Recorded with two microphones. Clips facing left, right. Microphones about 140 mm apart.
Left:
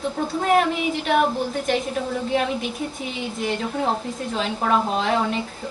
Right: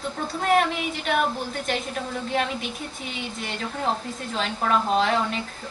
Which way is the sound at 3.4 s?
5° left (ahead or behind).